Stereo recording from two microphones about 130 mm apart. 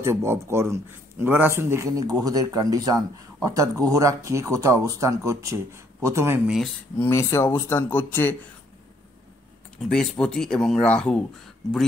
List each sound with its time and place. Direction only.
0.0 s speech: 20° right (ahead or behind)
6.4 s speech: centre (ahead or behind)
7.0 s speech: 20° left (ahead or behind)
9.8 s speech: 5° left (ahead or behind)